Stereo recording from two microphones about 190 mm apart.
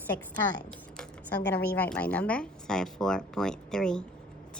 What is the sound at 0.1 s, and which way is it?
Speech, 60° left (ahead or behind).